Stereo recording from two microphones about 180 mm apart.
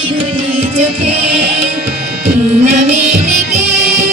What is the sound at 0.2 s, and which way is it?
Music, 35° right (ahead or behind).